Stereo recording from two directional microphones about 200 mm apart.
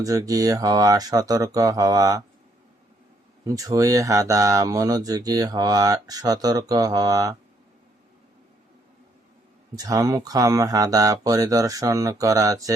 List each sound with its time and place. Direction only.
0.0 s speech: 15° right (ahead or behind)
3.4 s speech: 15° right (ahead or behind)
9.7 s speech: 15° right (ahead or behind)